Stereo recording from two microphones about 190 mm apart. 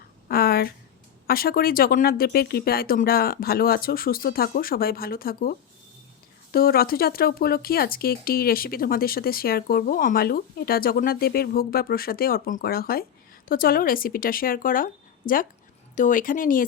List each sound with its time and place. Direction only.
0.3 s a sound: 50° left (ahead or behind)
1.3 s speech: 50° left (ahead or behind)
16.0 s speech: 45° left (ahead or behind)